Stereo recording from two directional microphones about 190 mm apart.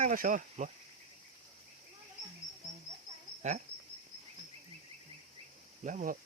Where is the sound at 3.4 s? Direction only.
35° right (ahead or behind).